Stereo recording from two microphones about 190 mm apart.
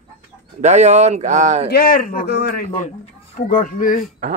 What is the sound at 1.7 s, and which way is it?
Speech, 50° left (ahead or behind).